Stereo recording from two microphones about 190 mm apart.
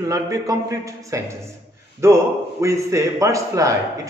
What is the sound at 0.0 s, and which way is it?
A man's voice, 20° right (ahead or behind).